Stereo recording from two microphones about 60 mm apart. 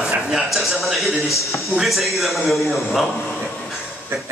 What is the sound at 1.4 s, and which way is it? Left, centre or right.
Speech, left.